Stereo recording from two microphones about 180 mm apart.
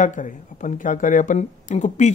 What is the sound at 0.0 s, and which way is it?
Speech, 45° left (ahead or behind).